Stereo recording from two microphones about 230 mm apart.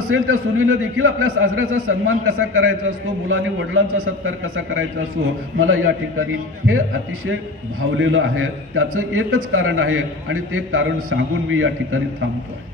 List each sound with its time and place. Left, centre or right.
0.1 s a man's voice: right
8.0 s a man's voice: right